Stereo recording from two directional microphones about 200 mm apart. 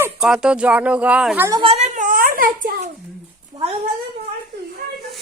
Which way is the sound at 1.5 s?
25° right (ahead or behind).